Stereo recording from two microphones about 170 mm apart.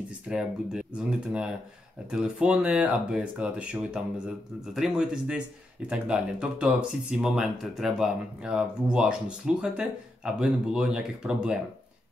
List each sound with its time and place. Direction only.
0.3 s speech: 5° right (ahead or behind)